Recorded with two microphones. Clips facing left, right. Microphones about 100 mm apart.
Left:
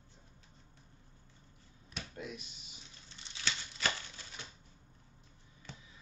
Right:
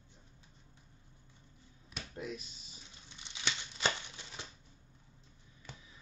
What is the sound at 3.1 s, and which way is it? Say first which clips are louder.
Crumpling: even; 15° right (ahead or behind).